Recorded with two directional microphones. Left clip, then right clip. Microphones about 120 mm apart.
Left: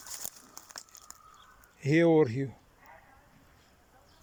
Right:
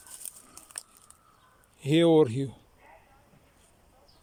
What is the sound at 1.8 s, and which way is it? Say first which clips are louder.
Speech: right 2 dB; 35° right (ahead or behind).